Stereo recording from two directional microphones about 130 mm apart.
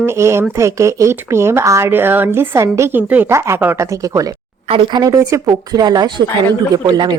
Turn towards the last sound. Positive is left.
turn(degrees=-35)  # may be behind; listen again after turning